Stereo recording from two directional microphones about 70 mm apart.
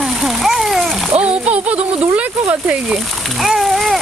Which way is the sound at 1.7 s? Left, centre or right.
Right.